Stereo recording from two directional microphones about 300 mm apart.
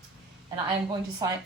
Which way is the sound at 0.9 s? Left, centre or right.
Centre.